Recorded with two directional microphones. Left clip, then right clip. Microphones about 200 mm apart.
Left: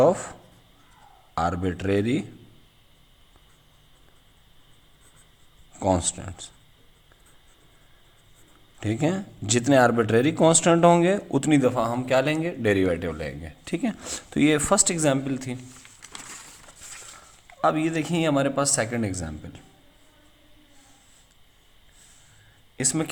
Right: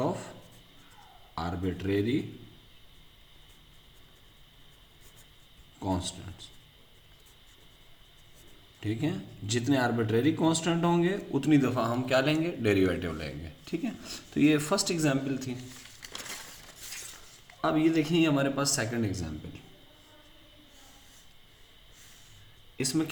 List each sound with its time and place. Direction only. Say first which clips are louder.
0.0 s speech: left 13 dB; 55° left (ahead or behind)
1.4 s speech: left 9 dB; 60° left (ahead or behind)
5.8 s speech: left 10 dB; 55° left (ahead or behind)
8.8 s speech: left 7 dB; 55° left (ahead or behind); by 13.5 s 30° left (ahead or behind)
13.7 s a man's voice: left 6 dB; 45° left (ahead or behind)
17.6 s a man's voice: left 3 dB; 50° left (ahead or behind)
22.8 s speech: left 3 dB; 60° left (ahead or behind)